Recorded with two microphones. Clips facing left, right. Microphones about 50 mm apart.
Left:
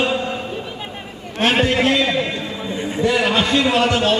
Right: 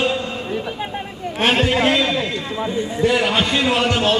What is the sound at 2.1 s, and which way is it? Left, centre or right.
Speech, left.